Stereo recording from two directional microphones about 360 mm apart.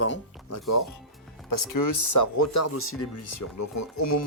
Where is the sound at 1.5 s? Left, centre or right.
Left.